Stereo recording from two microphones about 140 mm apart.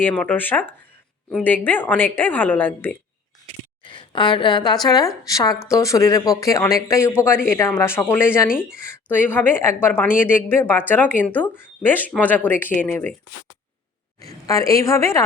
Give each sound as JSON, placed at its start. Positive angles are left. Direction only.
{"t": 0.0, "sound": "a woman's voice", "side_deg": 10}
{"t": 3.8, "sound": "a woman's voice", "side_deg": 35}
{"t": 14.2, "sound": "speech", "side_deg": 25}